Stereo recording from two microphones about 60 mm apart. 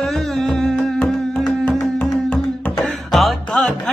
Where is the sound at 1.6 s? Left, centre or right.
Left.